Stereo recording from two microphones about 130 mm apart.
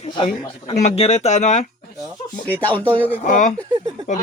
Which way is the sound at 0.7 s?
55° left (ahead or behind).